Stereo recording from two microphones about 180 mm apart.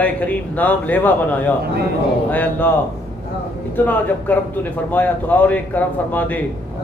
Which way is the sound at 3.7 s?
10° left (ahead or behind).